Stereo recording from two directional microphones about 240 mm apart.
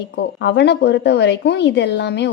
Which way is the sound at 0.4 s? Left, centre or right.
Left.